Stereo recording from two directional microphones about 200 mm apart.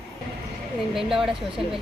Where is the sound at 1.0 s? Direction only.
Centre (ahead or behind).